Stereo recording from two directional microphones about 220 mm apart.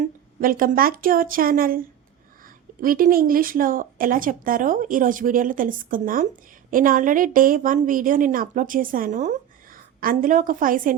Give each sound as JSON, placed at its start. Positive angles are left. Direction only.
{"t": 0.0, "sound": "speech", "side_deg": -40}
{"t": 2.8, "sound": "a woman's voice", "side_deg": -40}